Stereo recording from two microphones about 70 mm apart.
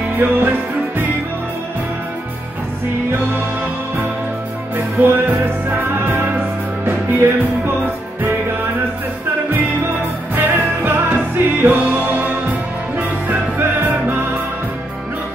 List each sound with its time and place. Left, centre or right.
0.2 s music: right
4.7 s music: right
7.2 s music: right
10.3 s music: right